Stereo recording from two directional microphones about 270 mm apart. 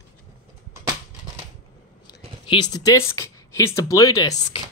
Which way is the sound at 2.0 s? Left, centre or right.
Centre.